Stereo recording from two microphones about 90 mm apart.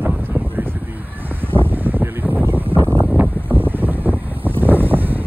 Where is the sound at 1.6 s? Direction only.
20° right (ahead or behind).